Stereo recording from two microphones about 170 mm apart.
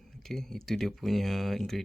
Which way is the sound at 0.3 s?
Centre (ahead or behind).